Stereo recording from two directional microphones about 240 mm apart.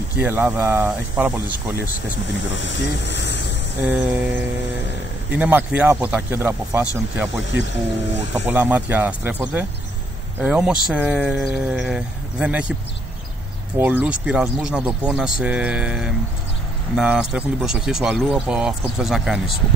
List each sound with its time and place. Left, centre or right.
0.2 s speech: centre
2.5 s speech: left
3.8 s speech: centre
5.3 s speech: centre
8.3 s speech: centre
13.7 s speech: centre